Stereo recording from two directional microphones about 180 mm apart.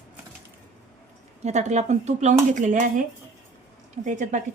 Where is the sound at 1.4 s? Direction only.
40° right (ahead or behind).